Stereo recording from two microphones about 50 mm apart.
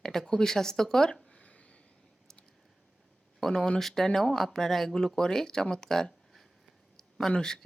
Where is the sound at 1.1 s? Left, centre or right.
Left.